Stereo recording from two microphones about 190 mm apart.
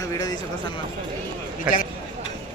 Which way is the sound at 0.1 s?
20° left (ahead or behind).